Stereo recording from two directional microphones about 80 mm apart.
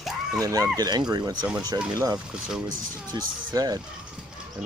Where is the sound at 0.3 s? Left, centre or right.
Right.